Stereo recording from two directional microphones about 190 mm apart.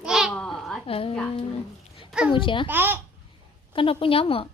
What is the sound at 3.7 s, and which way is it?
Speech, 25° left (ahead or behind).